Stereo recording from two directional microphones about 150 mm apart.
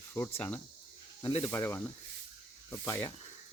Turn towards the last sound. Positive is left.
turn(degrees=15)  # may be behind; listen again after turning